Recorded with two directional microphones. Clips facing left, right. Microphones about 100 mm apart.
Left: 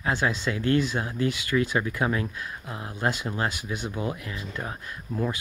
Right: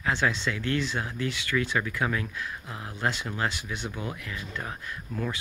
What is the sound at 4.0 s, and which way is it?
Speech, 30° left (ahead or behind).